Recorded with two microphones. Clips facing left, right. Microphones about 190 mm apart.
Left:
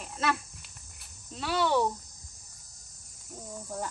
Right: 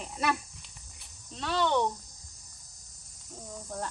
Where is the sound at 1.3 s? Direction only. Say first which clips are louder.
Left 1 dB; 5° left (ahead or behind).